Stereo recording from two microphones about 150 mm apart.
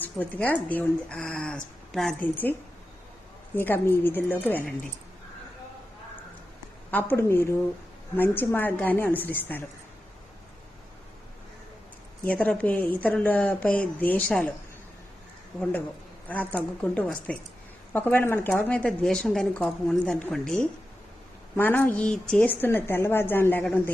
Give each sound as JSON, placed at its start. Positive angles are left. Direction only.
{"t": 0.0, "sound": "speech", "side_deg": 10}
{"t": 6.9, "sound": "speech", "side_deg": 15}
{"t": 12.2, "sound": "speech", "side_deg": 10}
{"t": 16.3, "sound": "speech", "side_deg": 10}